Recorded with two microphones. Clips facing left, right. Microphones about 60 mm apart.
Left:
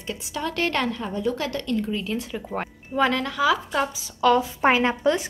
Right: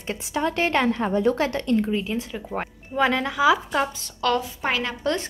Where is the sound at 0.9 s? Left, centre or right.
Right.